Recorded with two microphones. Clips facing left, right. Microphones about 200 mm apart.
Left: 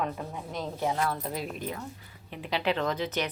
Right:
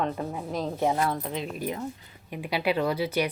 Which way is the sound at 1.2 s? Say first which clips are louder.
Right 2 dB; 5° left (ahead or behind).